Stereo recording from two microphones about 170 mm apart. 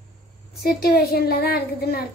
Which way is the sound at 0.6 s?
65° left (ahead or behind).